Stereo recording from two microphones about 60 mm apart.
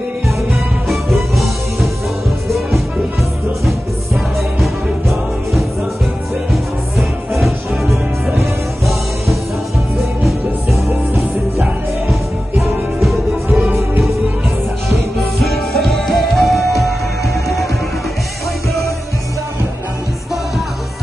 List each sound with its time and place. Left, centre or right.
0.8 s music: centre
6.5 s music: centre
10.9 s music: right
13.7 s music: right
15.3 s music: centre